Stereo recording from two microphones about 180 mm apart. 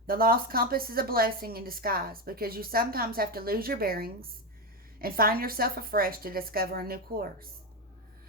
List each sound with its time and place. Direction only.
0.1 s a woman's voice: 55° right (ahead or behind)